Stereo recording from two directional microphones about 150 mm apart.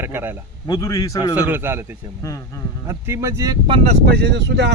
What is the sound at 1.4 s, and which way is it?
Speech, 15° right (ahead or behind).